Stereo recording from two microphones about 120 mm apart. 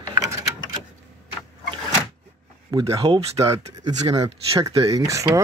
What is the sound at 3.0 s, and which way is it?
Speech, 55° right (ahead or behind).